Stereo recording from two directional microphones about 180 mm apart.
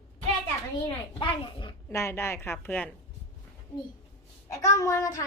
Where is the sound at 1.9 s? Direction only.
15° left (ahead or behind).